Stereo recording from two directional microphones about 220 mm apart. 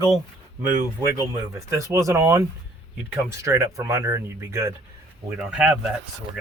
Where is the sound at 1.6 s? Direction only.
15° right (ahead or behind).